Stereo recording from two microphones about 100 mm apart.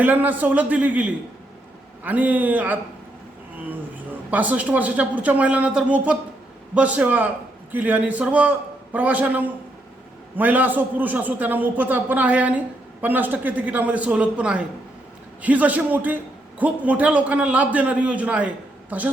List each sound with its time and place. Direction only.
0.0 s a man's voice: 15° right (ahead or behind)
4.3 s a man's voice: 15° right (ahead or behind)